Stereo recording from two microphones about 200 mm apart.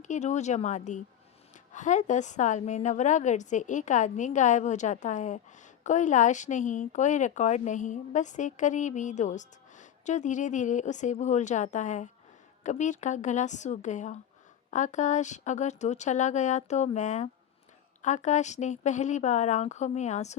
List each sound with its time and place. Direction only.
0.0 s speech: 35° left (ahead or behind)